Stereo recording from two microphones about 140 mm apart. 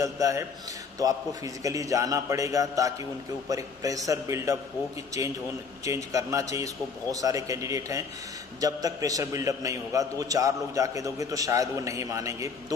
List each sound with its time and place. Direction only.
0.0 s a man's voice: 25° right (ahead or behind)